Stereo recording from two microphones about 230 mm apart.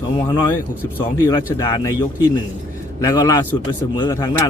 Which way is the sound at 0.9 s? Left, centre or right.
Centre.